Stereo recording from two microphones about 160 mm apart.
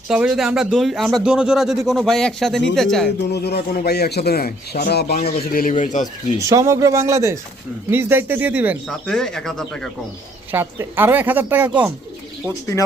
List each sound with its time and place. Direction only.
0.1 s speech: 5° right (ahead or behind)
3.2 s speech: 90° left; by 6.4 s 50° left (ahead or behind)
6.5 s a woman's voice: 20° right (ahead or behind)
8.9 s speech: 5° left (ahead or behind)
10.5 s a woman's voice: 15° right (ahead or behind)